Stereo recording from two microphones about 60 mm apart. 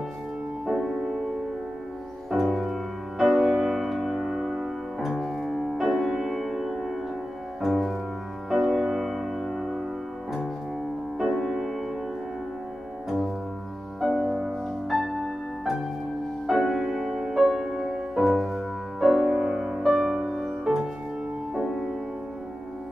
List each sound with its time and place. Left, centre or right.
0.7 s music: centre
2.3 s music: centre
5.8 s music: centre
11.1 s music: centre
14.0 s music: centre
16.4 s music: centre